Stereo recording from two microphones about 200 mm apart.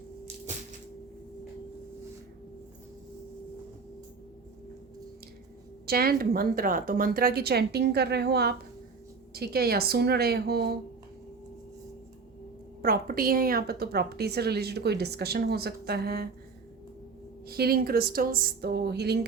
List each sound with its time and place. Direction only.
5.8 s a woman's voice: 50° right (ahead or behind)
12.8 s a woman's voice: 45° right (ahead or behind)
17.4 s a woman's voice: 50° right (ahead or behind)